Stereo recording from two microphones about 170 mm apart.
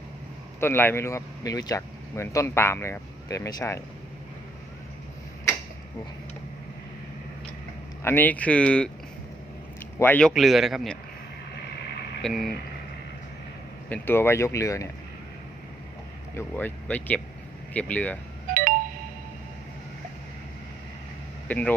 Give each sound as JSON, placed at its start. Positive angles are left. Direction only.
{"t": 0.6, "sound": "speech", "side_deg": 15}
{"t": 8.0, "sound": "speech", "side_deg": 10}
{"t": 10.0, "sound": "speech", "side_deg": 10}
{"t": 12.2, "sound": "speech", "side_deg": 0}
{"t": 13.9, "sound": "speech", "side_deg": 15}
{"t": 16.3, "sound": "speech", "side_deg": 15}
{"t": 18.5, "sound": "ringtone", "side_deg": -55}
{"t": 21.4, "sound": "speech", "side_deg": 10}